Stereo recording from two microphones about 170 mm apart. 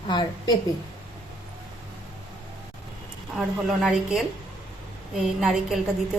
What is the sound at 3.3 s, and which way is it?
A woman's voice, centre (ahead or behind).